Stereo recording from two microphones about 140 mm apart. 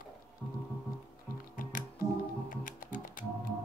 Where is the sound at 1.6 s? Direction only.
70° left (ahead or behind).